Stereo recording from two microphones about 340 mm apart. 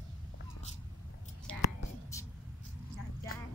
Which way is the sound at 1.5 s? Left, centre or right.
Centre.